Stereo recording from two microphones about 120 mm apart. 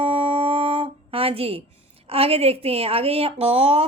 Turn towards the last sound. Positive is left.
turn(degrees=-55)  # may be behind; listen again after turning